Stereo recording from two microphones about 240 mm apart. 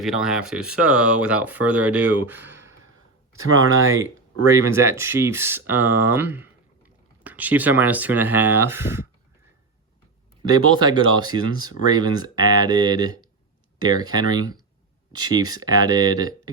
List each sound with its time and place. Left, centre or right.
0.0 s speech: centre
3.4 s speech: right
4.5 s speech: centre
10.5 s speech: centre